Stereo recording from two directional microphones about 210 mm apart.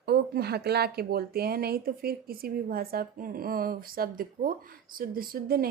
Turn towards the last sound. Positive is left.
turn(degrees=-45)  # may be behind; listen again after turning